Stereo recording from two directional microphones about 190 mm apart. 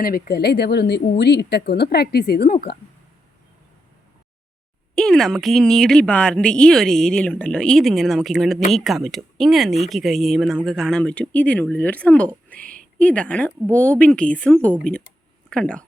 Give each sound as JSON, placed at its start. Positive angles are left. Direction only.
{"t": 0.0, "sound": "a woman's voice", "side_deg": 55}
{"t": 4.9, "sound": "speech", "side_deg": 5}
{"t": 12.5, "sound": "a sound", "side_deg": 5}
{"t": 13.0, "sound": "speech", "side_deg": 5}